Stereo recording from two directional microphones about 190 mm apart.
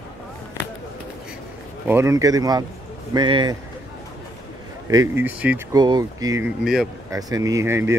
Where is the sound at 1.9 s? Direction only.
15° right (ahead or behind).